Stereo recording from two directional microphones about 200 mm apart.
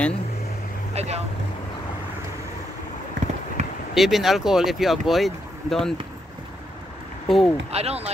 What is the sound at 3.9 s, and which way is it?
Speech, centre (ahead or behind).